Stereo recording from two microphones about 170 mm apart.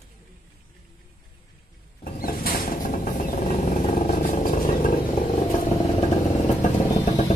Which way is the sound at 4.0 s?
50° left (ahead or behind).